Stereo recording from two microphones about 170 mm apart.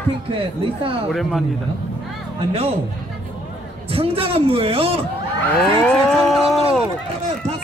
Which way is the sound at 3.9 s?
35° right (ahead or behind).